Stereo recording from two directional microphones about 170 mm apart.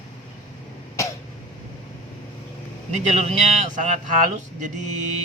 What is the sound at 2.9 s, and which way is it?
A man's voice, 40° right (ahead or behind).